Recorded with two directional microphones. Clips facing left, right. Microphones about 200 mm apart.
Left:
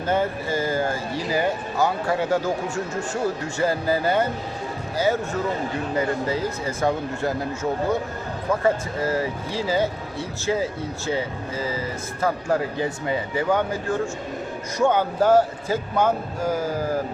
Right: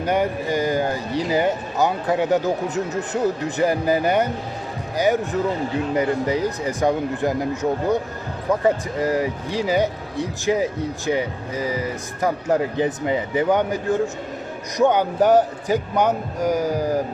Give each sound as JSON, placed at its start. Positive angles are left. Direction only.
{"t": 0.0, "sound": "speech", "side_deg": -15}